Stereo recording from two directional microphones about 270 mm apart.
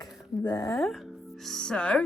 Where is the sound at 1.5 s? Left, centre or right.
Centre.